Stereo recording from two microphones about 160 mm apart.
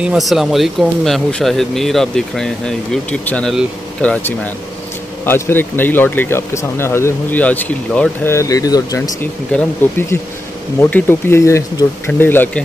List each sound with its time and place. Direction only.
0.0 s speech: 5° right (ahead or behind); by 9.1 s 25° left (ahead or behind)
9.5 s speech: 10° left (ahead or behind)